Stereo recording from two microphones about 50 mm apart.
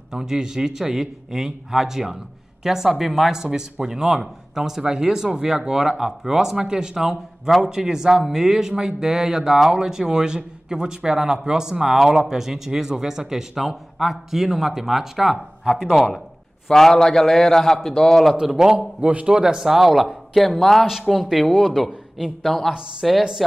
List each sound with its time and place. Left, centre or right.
0.1 s a man's voice: centre
18.3 s speech: centre
18.9 s speech: right
19.2 s a man's voice: centre